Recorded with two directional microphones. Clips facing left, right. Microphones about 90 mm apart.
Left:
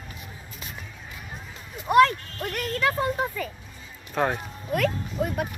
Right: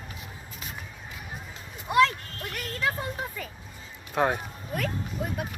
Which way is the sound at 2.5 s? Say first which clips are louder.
Left 5 dB; 70° left (ahead or behind).